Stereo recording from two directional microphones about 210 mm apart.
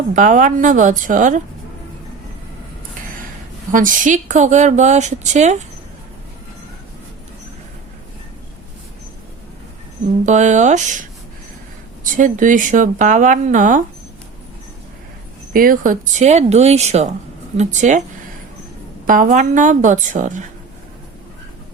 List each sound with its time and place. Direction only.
0.1 s a woman's voice: 40° right (ahead or behind)
3.7 s a woman's voice: 40° right (ahead or behind)
10.2 s a woman's voice: 35° right (ahead or behind)
12.0 s a woman's voice: 40° right (ahead or behind)
15.5 s a woman's voice: 40° right (ahead or behind)
19.0 s a woman's voice: 40° right (ahead or behind)